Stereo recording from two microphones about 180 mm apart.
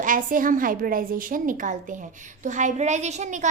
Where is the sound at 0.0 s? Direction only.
50° right (ahead or behind).